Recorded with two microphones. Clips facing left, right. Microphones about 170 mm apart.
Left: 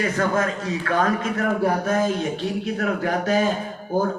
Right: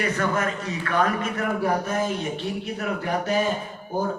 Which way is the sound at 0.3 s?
90° left.